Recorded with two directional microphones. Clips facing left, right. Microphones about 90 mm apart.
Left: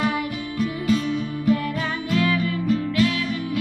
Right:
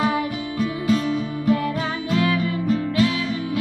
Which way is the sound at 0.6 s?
35° right (ahead or behind).